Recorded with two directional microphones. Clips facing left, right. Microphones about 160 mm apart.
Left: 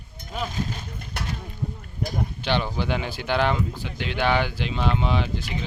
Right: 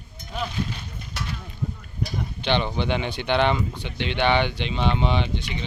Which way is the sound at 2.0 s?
45° left (ahead or behind).